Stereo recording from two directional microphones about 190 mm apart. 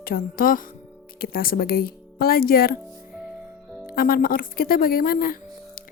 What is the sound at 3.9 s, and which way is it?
Speech, 50° left (ahead or behind).